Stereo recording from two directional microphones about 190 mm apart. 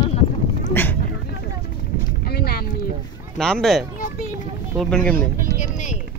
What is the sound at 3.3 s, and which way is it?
Speech, centre (ahead or behind).